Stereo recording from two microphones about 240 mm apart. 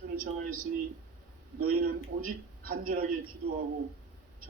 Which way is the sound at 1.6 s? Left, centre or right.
Right.